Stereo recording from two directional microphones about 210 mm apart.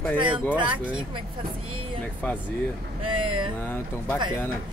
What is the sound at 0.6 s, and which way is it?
Speech, 25° right (ahead or behind).